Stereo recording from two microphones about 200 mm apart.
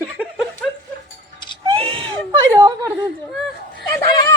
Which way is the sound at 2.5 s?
20° right (ahead or behind).